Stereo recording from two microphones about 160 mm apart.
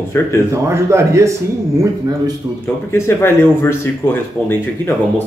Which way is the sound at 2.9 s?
15° left (ahead or behind).